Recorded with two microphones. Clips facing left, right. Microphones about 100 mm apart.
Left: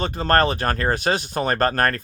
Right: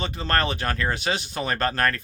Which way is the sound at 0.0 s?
45° left (ahead or behind).